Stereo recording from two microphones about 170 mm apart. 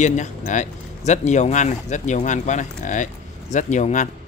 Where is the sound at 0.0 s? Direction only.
45° left (ahead or behind).